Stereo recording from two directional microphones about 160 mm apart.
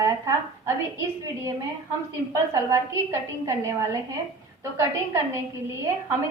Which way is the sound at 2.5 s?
20° right (ahead or behind).